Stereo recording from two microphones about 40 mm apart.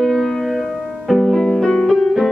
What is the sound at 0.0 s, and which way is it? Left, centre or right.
Music, centre.